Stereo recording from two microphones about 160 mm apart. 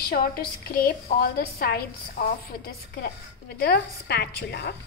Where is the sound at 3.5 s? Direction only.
80° left.